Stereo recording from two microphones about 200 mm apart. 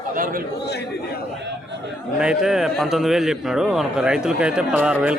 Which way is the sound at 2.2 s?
5° right (ahead or behind).